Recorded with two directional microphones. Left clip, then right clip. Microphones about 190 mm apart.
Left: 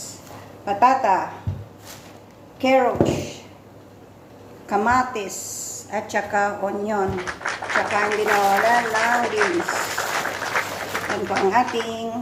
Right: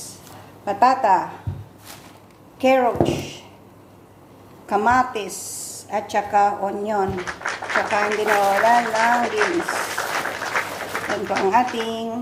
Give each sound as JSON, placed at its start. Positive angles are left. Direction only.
{"t": 0.6, "sound": "a woman's voice", "side_deg": -25}
{"t": 2.6, "sound": "speech", "side_deg": -25}
{"t": 4.7, "sound": "a woman's voice", "side_deg": -25}
{"t": 7.1, "sound": "speech", "side_deg": 0}